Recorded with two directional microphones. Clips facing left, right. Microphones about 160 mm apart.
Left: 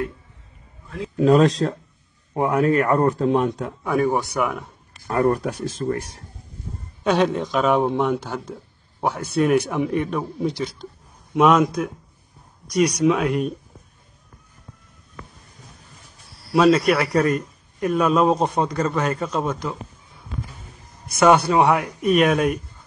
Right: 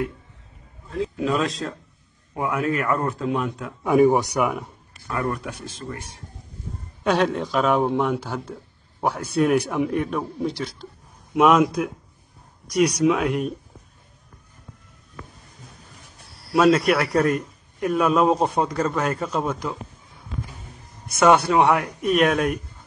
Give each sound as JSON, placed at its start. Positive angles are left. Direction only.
{"t": 1.1, "sound": "speech", "side_deg": 40}
{"t": 3.8, "sound": "speech", "side_deg": -15}
{"t": 4.4, "sound": "a man's voice", "side_deg": 0}
{"t": 5.0, "sound": "speech", "side_deg": 40}
{"t": 7.0, "sound": "a man's voice", "side_deg": 0}
{"t": 16.5, "sound": "a man's voice", "side_deg": 0}
{"t": 21.2, "sound": "a man's voice", "side_deg": 0}